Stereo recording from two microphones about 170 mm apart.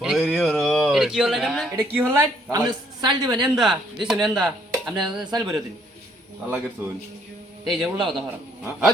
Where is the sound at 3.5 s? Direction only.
Centre (ahead or behind).